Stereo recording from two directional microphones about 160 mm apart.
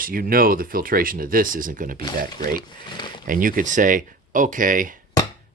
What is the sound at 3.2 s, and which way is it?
Speech, 60° right (ahead or behind).